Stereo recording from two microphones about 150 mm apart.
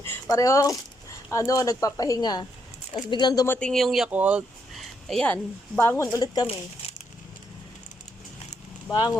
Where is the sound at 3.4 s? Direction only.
15° left (ahead or behind).